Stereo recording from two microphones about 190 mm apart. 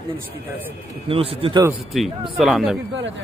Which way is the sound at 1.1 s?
30° right (ahead or behind).